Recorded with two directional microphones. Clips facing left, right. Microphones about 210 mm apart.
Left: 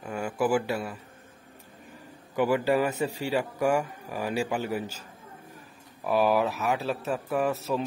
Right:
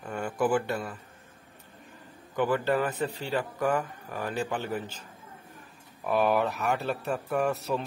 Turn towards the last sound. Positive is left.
turn(degrees=0)  # may be behind; listen again after turning